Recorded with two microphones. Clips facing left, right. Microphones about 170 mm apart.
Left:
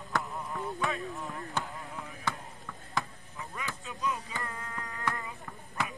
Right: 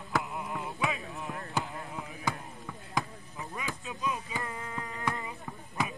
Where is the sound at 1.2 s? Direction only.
15° right (ahead or behind).